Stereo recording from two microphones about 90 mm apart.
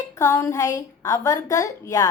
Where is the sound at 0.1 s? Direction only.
35° left (ahead or behind).